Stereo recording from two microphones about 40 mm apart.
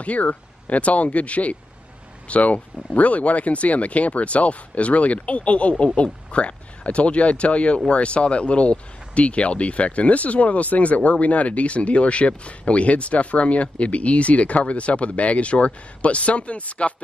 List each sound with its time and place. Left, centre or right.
0.0 s speech: left